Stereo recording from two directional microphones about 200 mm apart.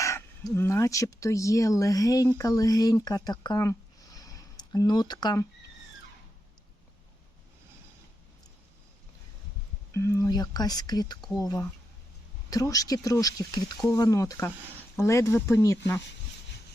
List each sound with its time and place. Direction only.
0.0 s speech: 15° left (ahead or behind)
9.9 s speech: 15° left (ahead or behind)